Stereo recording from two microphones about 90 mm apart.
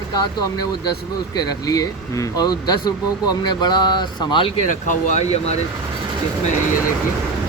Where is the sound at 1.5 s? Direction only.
45° left (ahead or behind); by 4.5 s 65° left (ahead or behind).